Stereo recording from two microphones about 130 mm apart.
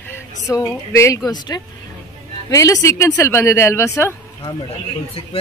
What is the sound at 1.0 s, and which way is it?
A man's voice, 25° left (ahead or behind).